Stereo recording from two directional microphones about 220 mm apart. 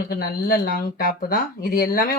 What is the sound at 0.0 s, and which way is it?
Speech, 45° left (ahead or behind).